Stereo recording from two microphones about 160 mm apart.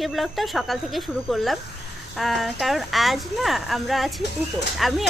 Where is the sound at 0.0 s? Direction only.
Centre (ahead or behind).